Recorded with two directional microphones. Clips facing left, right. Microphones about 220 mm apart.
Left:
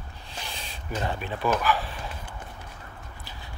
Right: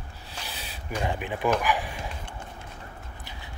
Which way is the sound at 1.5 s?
15° right (ahead or behind).